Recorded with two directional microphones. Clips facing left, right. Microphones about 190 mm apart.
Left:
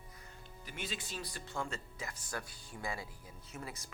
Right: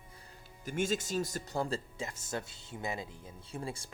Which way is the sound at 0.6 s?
45° right (ahead or behind).